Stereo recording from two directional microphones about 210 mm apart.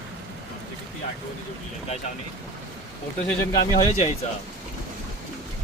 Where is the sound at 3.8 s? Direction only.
35° left (ahead or behind).